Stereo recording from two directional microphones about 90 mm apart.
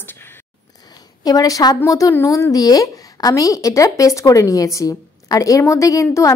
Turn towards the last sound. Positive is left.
turn(degrees=35)  # may be behind; listen again after turning